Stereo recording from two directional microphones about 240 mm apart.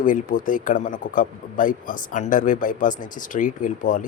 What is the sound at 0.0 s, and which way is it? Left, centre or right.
Speech, left.